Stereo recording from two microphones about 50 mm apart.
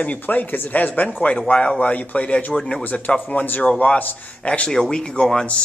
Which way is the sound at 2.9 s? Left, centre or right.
Left.